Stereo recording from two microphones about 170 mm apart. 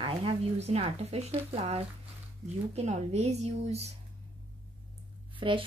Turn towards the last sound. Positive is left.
turn(degrees=-30)  # may be behind; listen again after turning